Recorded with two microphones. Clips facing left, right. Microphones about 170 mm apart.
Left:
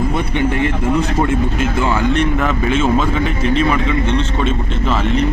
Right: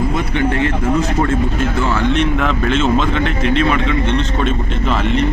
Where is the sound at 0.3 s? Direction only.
15° left (ahead or behind).